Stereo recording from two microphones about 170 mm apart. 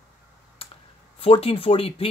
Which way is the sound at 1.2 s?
35° left (ahead or behind).